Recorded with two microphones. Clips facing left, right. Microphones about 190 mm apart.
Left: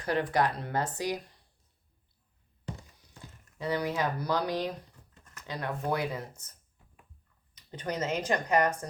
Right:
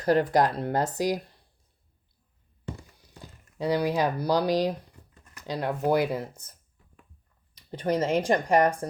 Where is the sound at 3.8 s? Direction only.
35° right (ahead or behind).